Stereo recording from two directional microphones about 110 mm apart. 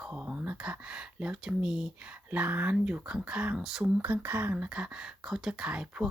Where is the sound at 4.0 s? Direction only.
15° right (ahead or behind).